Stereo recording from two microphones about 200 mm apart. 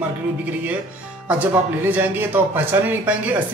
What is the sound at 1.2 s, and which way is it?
Speech, 10° right (ahead or behind).